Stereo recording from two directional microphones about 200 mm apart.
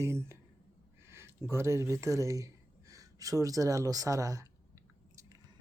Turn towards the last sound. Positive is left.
turn(degrees=-15)  # may be behind; listen again after turning